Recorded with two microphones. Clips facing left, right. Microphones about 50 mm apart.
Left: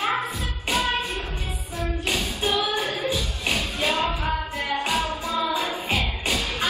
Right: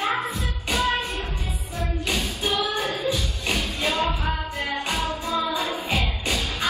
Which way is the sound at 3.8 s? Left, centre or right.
Left.